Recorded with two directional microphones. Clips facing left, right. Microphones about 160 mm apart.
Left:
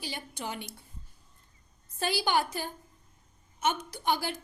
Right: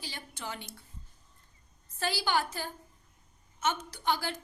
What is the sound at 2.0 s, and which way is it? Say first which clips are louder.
A woman's voice: left 2 dB; 15° left (ahead or behind).